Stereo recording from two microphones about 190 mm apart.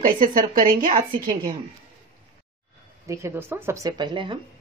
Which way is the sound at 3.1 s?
15° right (ahead or behind).